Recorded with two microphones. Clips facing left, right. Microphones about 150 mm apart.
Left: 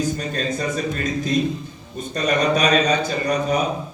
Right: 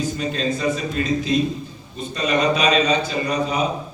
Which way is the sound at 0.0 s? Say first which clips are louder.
Even; 45° left (ahead or behind).